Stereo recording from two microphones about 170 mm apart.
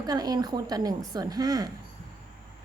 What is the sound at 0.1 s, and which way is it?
A woman's voice, 20° right (ahead or behind).